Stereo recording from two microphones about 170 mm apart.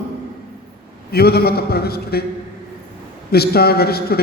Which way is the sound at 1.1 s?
65° left (ahead or behind).